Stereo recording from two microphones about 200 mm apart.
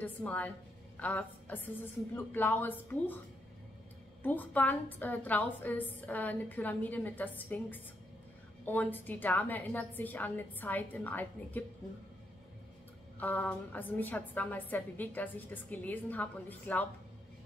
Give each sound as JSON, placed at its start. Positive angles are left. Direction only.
{"t": 0.0, "sound": "a woman's voice", "side_deg": 5}
{"t": 4.2, "sound": "a woman's voice", "side_deg": 10}
{"t": 13.2, "sound": "a woman's voice", "side_deg": 10}